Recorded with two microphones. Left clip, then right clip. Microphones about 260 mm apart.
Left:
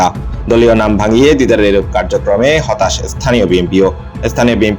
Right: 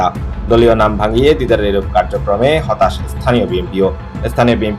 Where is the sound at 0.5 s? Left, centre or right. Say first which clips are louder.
Left 1 dB; left.